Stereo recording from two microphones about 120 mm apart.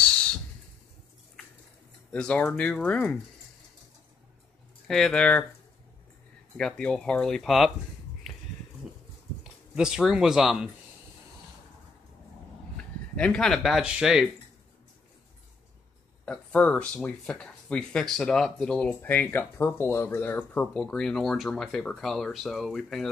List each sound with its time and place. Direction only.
0.0 s a sound: 10° left (ahead or behind)
2.1 s speech: 10° left (ahead or behind)
4.8 s speech: 5° left (ahead or behind)
6.5 s speech: 5° left (ahead or behind)
9.4 s speech: 5° right (ahead or behind)
13.1 s speech: 10° left (ahead or behind); by 14.2 s 5° right (ahead or behind)
16.3 s speech: 10° left (ahead or behind)